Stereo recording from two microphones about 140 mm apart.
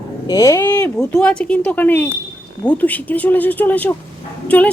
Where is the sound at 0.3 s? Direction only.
25° left (ahead or behind).